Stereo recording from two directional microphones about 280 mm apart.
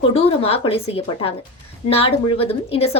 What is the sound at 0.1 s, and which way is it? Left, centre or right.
A woman's voice, left.